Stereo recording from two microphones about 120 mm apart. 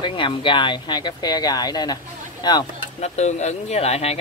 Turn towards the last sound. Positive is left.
turn(degrees=60)  # may be behind; listen again after turning